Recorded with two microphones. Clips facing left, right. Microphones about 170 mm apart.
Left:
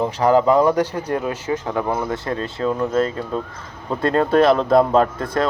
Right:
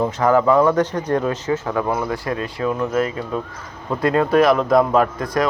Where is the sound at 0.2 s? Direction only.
25° left (ahead or behind); by 1.4 s 10° left (ahead or behind).